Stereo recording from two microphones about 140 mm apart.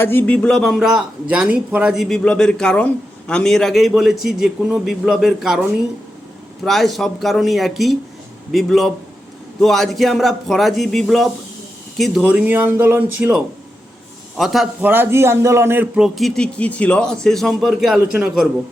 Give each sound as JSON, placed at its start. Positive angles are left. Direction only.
{"t": 0.0, "sound": "a man's voice", "side_deg": 15}
{"t": 6.7, "sound": "a man's voice", "side_deg": 0}
{"t": 12.2, "sound": "a man's voice", "side_deg": -10}
{"t": 14.3, "sound": "a man's voice", "side_deg": 0}
{"t": 16.0, "sound": "a man's voice", "side_deg": 0}